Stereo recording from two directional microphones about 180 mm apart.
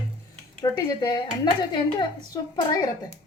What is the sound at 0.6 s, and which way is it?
Speech, 25° left (ahead or behind).